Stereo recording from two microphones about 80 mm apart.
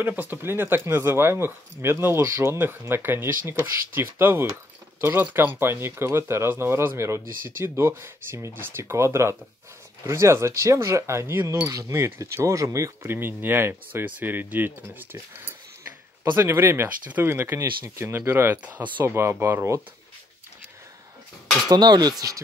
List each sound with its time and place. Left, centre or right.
0.0 s speech: right
18.6 s speech: centre
19.0 s speech: right
21.6 s speech: right